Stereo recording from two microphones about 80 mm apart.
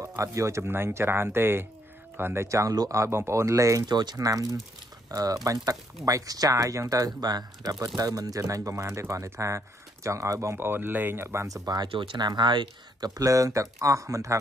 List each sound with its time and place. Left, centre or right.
0.0 s speech: right
2.4 s speech: right
2.9 s speech: right
3.8 s speech: right
4.3 s speech: right
10.6 s speech: right
11.4 s speech: right
11.9 s speech: right
13.1 s speech: right